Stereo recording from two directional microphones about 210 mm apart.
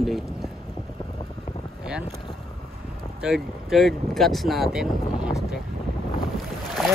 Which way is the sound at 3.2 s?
Centre (ahead or behind).